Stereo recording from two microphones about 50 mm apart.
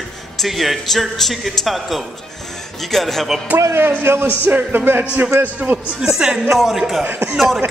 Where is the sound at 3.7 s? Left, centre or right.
Right.